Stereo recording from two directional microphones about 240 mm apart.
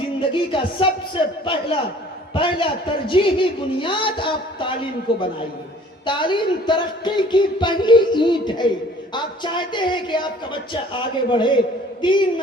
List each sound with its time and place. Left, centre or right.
0.2 s a man's voice: left